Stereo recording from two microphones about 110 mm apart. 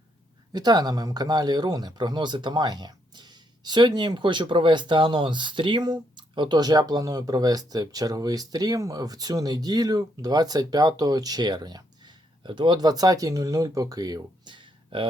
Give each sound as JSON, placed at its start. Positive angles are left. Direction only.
{"t": 0.5, "sound": "speech", "side_deg": -40}